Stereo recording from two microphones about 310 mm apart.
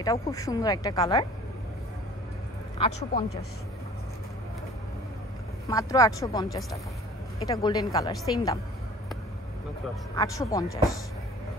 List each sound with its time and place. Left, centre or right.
0.0 s a woman's voice: centre
2.8 s a woman's voice: centre
5.7 s a woman's voice: centre
10.1 s a woman's voice: centre